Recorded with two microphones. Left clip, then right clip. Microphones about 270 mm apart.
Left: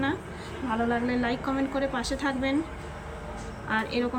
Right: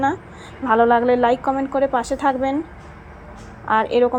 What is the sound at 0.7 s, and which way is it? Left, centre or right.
Speech, right.